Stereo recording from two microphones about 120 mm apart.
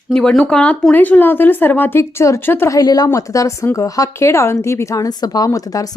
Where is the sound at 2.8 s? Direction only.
30° left (ahead or behind).